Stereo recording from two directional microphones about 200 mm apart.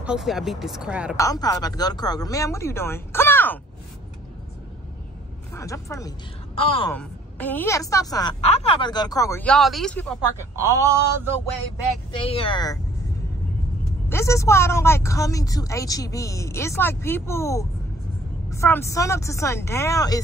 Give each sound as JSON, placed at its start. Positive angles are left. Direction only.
{"t": 0.0, "sound": "speech", "side_deg": -5}
{"t": 1.1, "sound": "speech", "side_deg": 15}
{"t": 5.5, "sound": "speech", "side_deg": 15}
{"t": 10.5, "sound": "speech", "side_deg": -15}
{"t": 12.2, "sound": "speech", "side_deg": 25}
{"t": 14.0, "sound": "speech", "side_deg": 15}